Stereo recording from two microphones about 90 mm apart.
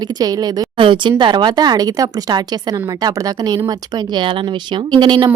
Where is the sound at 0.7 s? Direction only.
65° right (ahead or behind); by 3.5 s 45° right (ahead or behind).